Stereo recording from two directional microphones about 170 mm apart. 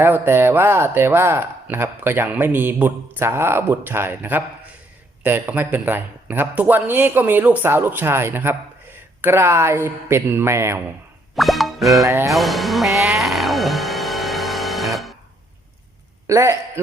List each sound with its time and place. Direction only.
0.0 s speech: 15° right (ahead or behind)
11.3 s music: centre (ahead or behind)
12.0 s speech: 15° right (ahead or behind)
12.3 s music: centre (ahead or behind)
16.2 s a man's voice: 15° right (ahead or behind)